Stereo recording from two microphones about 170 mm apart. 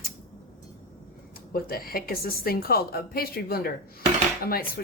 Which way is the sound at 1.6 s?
60° left (ahead or behind).